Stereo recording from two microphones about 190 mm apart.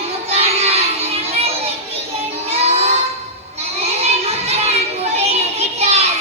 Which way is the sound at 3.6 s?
35° right (ahead or behind).